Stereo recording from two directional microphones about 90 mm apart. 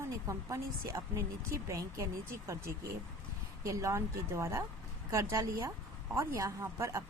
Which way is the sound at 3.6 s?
35° right (ahead or behind).